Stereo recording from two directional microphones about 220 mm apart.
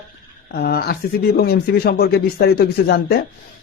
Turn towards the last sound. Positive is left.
turn(degrees=45)  # may be behind; listen again after turning